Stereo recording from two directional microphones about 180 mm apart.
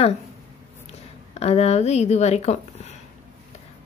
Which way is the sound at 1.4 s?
35° left (ahead or behind).